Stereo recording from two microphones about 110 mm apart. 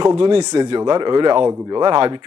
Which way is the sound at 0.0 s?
45° right (ahead or behind).